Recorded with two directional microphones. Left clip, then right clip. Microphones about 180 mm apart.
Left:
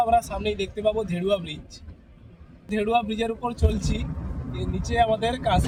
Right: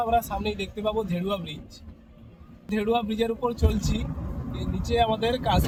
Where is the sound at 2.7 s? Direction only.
25° left (ahead or behind).